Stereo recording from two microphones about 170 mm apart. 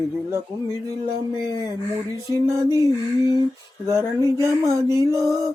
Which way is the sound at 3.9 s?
20° right (ahead or behind).